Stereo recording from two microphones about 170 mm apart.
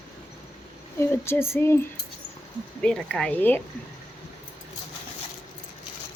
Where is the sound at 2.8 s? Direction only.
5° left (ahead or behind).